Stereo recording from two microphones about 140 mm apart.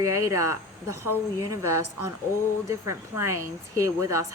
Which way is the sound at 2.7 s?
20° right (ahead or behind).